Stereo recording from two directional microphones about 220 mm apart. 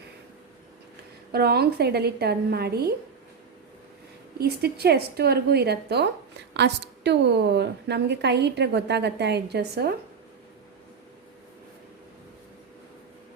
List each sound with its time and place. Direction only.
1.3 s a woman's voice: 45° right (ahead or behind)
4.4 s a woman's voice: 45° right (ahead or behind)